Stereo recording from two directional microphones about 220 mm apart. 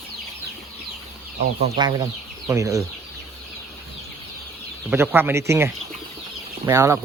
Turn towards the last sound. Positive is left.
turn(degrees=-10)  # may be behind; listen again after turning